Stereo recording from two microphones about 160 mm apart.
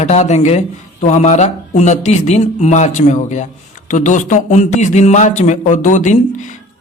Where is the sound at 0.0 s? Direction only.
45° left (ahead or behind).